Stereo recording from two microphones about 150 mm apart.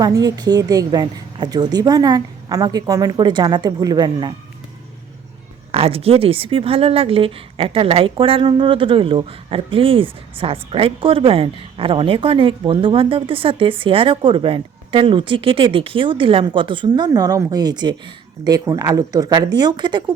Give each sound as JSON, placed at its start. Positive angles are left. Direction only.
{"t": 0.0, "sound": "a woman's voice", "side_deg": -25}
{"t": 5.7, "sound": "speech", "side_deg": -40}